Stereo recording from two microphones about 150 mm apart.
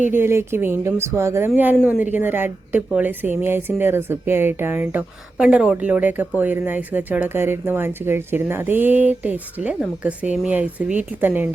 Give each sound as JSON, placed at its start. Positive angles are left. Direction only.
{"t": 0.1, "sound": "speech", "side_deg": -15}